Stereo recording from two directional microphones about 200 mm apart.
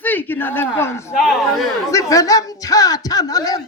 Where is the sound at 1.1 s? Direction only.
Centre (ahead or behind).